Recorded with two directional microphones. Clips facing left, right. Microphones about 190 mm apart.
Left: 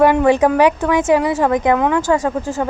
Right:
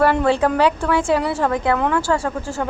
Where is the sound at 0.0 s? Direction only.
15° left (ahead or behind).